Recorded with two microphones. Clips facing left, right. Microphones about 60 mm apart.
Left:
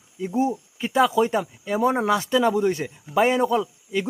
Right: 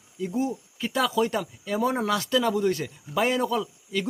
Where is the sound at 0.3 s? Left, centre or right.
Left.